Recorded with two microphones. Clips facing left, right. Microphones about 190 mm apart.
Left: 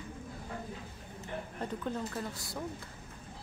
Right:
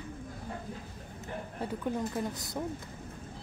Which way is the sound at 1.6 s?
15° right (ahead or behind).